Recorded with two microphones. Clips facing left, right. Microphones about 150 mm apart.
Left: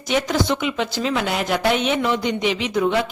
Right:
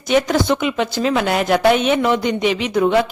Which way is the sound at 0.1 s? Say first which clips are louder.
Right 4 dB; 55° right (ahead or behind).